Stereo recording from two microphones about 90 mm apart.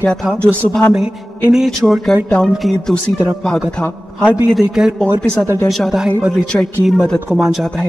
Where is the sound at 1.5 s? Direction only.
Centre (ahead or behind).